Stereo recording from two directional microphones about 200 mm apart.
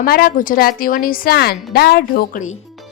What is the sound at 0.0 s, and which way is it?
A woman's voice, 45° left (ahead or behind).